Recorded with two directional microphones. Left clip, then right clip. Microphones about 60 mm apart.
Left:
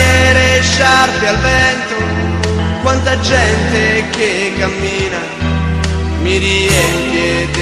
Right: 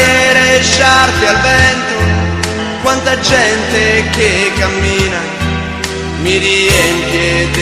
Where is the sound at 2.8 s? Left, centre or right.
Right.